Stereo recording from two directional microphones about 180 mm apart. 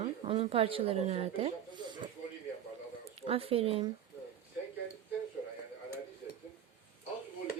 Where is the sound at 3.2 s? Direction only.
30° right (ahead or behind).